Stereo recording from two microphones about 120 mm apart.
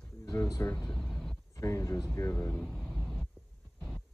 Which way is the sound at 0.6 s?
10° left (ahead or behind).